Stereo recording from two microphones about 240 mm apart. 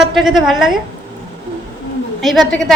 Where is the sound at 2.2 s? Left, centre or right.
Centre.